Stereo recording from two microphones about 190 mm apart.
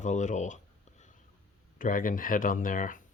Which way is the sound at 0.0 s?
40° left (ahead or behind).